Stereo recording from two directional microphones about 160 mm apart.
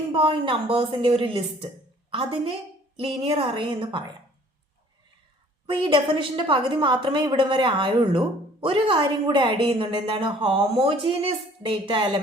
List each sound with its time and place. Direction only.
0.1 s a woman's voice: 35° right (ahead or behind)
5.6 s a woman's voice: 35° right (ahead or behind)